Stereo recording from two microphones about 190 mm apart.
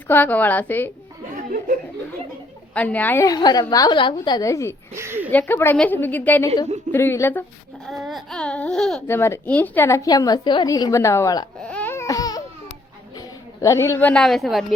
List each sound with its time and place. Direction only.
0.1 s speech: 10° left (ahead or behind)
2.7 s speech: 10° left (ahead or behind)
4.9 s a sound: 10° right (ahead or behind)
5.3 s speech: 10° left (ahead or behind)
7.9 s speech: centre (ahead or behind); by 11.4 s 15° left (ahead or behind)
11.6 s a sound: 5° left (ahead or behind)
13.1 s a woman's voice: 15° left (ahead or behind); by 14.6 s centre (ahead or behind)